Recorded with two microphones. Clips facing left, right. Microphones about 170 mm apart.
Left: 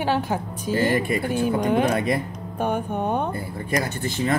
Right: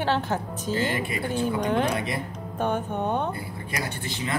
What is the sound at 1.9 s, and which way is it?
Speech, 50° left (ahead or behind).